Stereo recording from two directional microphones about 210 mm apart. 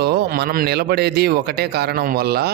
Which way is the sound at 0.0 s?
50° right (ahead or behind).